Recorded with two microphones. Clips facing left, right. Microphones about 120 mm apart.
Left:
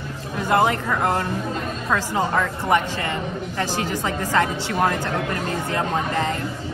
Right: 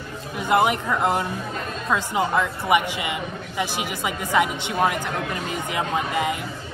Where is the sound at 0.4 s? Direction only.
15° right (ahead or behind).